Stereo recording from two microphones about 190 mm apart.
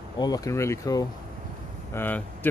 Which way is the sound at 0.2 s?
20° left (ahead or behind).